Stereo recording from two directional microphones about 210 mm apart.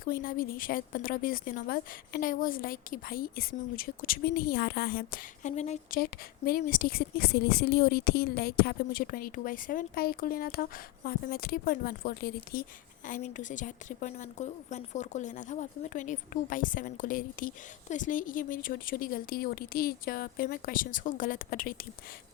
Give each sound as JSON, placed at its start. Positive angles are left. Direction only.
{"t": 0.0, "sound": "a woman's voice", "side_deg": 40}
{"t": 6.0, "sound": "a woman's voice", "side_deg": 45}